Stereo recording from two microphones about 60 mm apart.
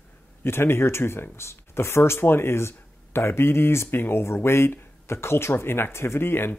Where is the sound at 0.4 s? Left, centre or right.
Left.